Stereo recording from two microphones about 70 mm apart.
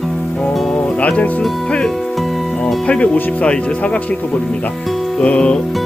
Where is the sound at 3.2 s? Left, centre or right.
Left.